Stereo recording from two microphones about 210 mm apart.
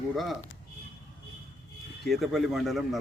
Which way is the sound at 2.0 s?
Centre (ahead or behind).